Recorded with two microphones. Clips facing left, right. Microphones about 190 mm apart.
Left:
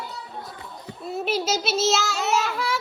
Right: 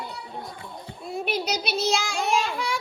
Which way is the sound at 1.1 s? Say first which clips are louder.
Left 3 dB; 5° left (ahead or behind).